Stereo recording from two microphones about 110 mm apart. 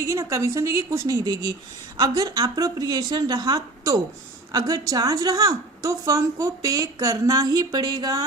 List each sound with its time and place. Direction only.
0.0 s a woman's voice: 30° right (ahead or behind)